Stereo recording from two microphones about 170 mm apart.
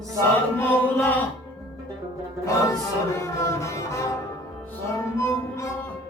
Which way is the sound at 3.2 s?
15° left (ahead or behind).